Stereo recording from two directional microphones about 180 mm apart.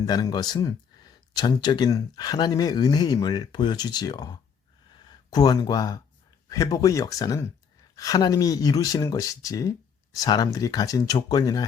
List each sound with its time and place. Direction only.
0.0 s speech: 20° left (ahead or behind)